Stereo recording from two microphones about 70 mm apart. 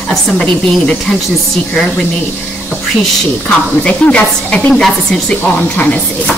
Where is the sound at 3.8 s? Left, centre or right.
Centre.